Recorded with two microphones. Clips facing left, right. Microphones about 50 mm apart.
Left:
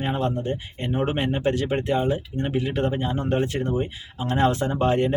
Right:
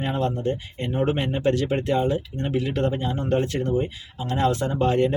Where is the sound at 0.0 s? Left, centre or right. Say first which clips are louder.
Right 1 dB; centre.